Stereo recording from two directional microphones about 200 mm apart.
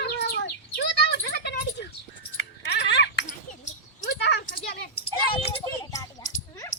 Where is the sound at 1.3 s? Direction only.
55° left (ahead or behind).